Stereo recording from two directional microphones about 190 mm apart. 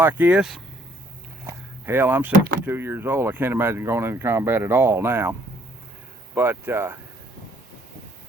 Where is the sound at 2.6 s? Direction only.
10° right (ahead or behind).